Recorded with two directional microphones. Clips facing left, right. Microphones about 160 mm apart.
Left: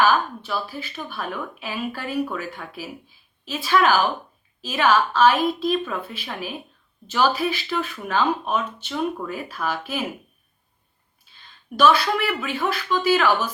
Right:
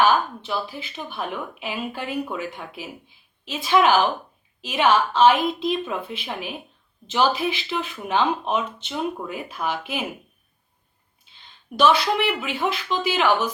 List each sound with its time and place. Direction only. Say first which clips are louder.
0.0 s speech: even; 20° right (ahead or behind)
11.8 s a woman's voice: even; 20° right (ahead or behind)